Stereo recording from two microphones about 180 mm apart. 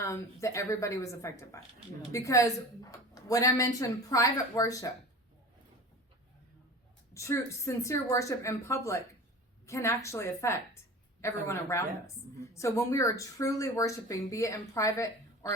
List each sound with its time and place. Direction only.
0.0 s a woman's voice: 15° left (ahead or behind)
7.1 s a woman's voice: 15° left (ahead or behind)